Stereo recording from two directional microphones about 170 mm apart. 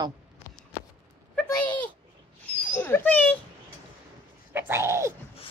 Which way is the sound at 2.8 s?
15° left (ahead or behind).